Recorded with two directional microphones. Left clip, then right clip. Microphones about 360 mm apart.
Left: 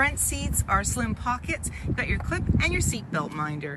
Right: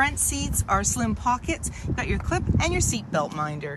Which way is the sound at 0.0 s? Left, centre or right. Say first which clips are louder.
Right 1 dB; centre.